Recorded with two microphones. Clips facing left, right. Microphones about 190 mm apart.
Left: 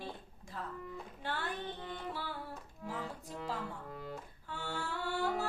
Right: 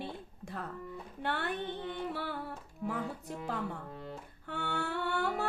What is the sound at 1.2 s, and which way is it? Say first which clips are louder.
Music: right 5 dB; 65° right (ahead or behind).